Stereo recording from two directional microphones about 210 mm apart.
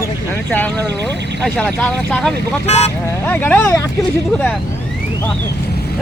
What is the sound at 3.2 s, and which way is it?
Speech, 10° left (ahead or behind).